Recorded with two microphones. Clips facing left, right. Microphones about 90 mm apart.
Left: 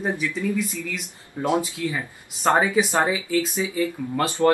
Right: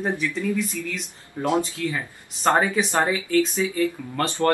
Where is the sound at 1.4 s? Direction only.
15° left (ahead or behind).